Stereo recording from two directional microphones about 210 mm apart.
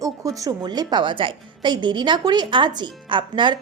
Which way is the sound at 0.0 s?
15° right (ahead or behind).